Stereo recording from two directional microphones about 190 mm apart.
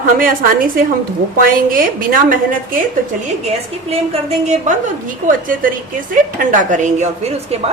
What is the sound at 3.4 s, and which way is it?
A woman's voice, 35° right (ahead or behind).